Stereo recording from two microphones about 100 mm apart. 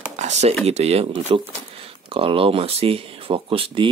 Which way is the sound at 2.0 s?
65° right (ahead or behind).